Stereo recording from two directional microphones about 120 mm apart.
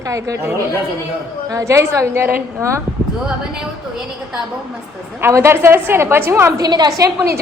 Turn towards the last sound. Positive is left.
turn(degrees=-25)  # may be behind; listen again after turning